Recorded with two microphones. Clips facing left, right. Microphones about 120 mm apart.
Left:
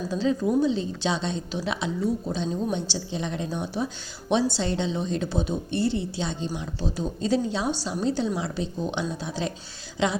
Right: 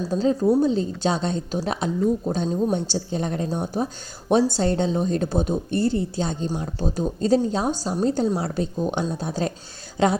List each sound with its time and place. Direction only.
0.0 s a woman's voice: 40° right (ahead or behind)